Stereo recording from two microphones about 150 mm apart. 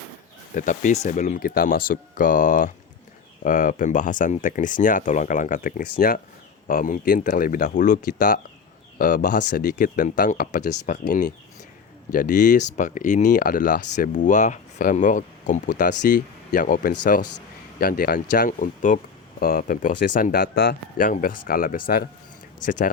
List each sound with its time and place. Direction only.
0.5 s speech: 55° left (ahead or behind)
17.7 s speech: 80° left; by 18.9 s 60° left (ahead or behind)
19.4 s speech: 75° left (ahead or behind)